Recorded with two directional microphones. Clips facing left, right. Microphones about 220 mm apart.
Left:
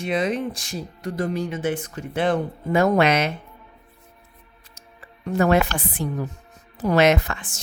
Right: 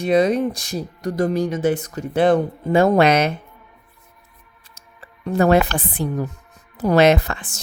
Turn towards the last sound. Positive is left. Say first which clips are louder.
# right 3 dB
turn(degrees=-35)  # may be behind; listen again after turning